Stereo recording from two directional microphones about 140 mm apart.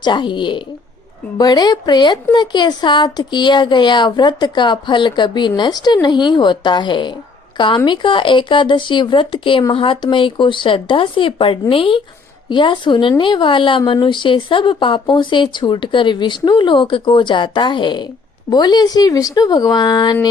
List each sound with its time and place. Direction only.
0.0 s a woman's voice: 35° left (ahead or behind)